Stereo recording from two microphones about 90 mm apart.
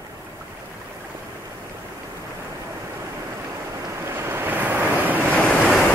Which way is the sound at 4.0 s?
25° right (ahead or behind).